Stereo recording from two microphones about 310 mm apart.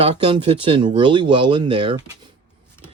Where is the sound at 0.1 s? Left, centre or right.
Centre.